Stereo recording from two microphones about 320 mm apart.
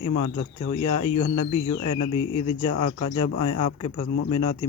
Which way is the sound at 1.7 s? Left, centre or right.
Left.